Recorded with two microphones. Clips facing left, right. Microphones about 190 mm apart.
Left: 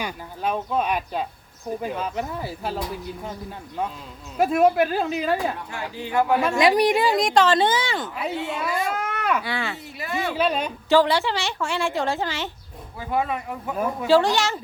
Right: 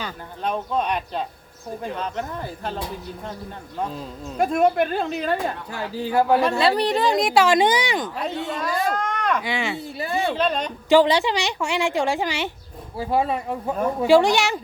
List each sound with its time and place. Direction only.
0.0 s speech: 5° left (ahead or behind)
4.4 s speech: 5° left (ahead or behind)
5.7 s speech: 35° right (ahead or behind)
6.6 s a woman's voice: 15° left (ahead or behind); by 8.1 s 15° right (ahead or behind)
8.1 s speech: 5° left (ahead or behind)
9.4 s a woman's voice: 15° right (ahead or behind)
9.7 s speech: 30° right (ahead or behind)
10.3 s speech: 5° left (ahead or behind)
10.8 s a woman's voice: 15° right (ahead or behind)
13.0 s speech: 30° right (ahead or behind)
14.1 s a woman's voice: 15° right (ahead or behind)